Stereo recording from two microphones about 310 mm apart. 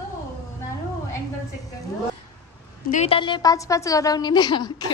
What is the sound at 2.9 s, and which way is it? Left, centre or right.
A woman's voice, centre.